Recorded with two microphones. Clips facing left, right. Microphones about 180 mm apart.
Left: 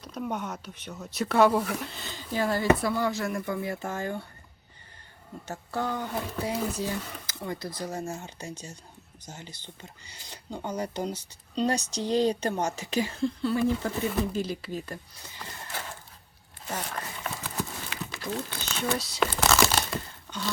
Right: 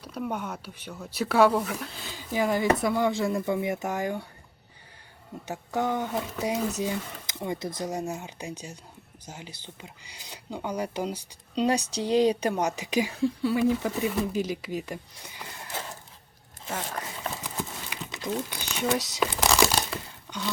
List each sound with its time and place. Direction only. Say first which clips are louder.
0.0 s speech: right 1 dB; 5° right (ahead or behind)
5.5 s speech: right 3 dB; 15° right (ahead or behind)
16.6 s speech: right 1 dB; 10° right (ahead or behind)
17.2 s horse: left 1 dB; 20° right (ahead or behind)
19.2 s crumpling: left 1 dB; 15° right (ahead or behind)